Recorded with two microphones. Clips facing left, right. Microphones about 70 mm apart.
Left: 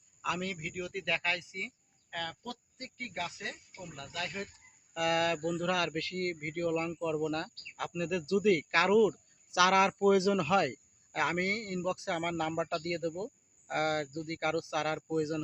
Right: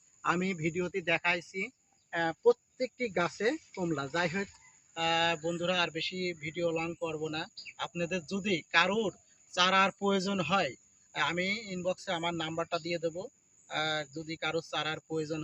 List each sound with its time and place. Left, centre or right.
0.2 s speech: right
0.9 s speech: centre
2.0 s speech: right
3.1 s speech: right
4.9 s speech: left